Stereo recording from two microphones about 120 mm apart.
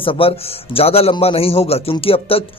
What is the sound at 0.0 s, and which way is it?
A man's voice, 50° left (ahead or behind).